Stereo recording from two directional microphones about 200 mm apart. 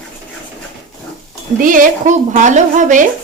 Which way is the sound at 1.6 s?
40° right (ahead or behind).